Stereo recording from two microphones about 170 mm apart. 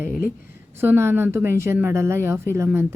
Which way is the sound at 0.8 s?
15° right (ahead or behind).